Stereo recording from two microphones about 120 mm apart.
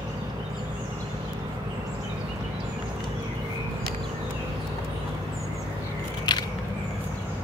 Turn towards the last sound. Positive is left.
turn(degrees=35)  # may be behind; listen again after turning